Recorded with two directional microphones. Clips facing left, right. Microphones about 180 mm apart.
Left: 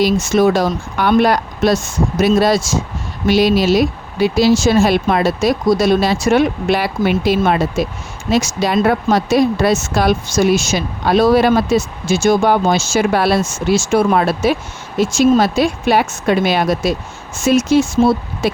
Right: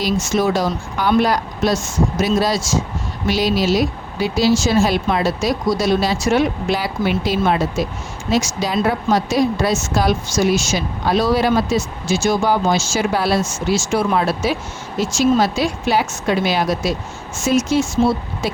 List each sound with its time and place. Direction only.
0.0 s speech: 60° left (ahead or behind)